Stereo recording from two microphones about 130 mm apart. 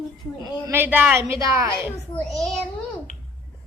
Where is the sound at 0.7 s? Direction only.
15° right (ahead or behind).